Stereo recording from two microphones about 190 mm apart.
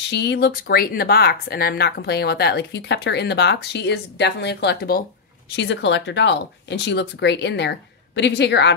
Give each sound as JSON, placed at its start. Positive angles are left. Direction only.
{"t": 0.1, "sound": "speech", "side_deg": 65}
{"t": 5.6, "sound": "speech", "side_deg": 70}